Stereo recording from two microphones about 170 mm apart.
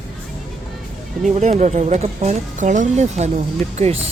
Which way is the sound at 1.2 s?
40° right (ahead or behind).